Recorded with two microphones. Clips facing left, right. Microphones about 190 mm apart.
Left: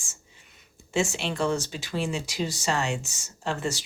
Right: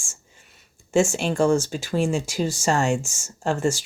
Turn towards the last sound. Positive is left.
turn(degrees=-45)  # may be behind; listen again after turning